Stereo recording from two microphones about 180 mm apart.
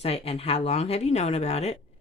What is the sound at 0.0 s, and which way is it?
Speech, 35° left (ahead or behind).